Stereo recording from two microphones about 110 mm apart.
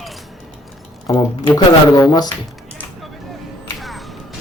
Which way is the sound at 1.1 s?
40° left (ahead or behind).